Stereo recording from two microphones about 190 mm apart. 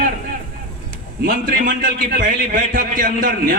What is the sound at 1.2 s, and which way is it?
A man's voice, 50° right (ahead or behind).